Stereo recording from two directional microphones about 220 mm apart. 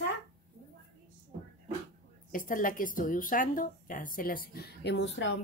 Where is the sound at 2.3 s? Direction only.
40° left (ahead or behind).